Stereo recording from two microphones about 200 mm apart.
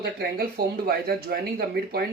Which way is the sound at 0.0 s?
50° right (ahead or behind).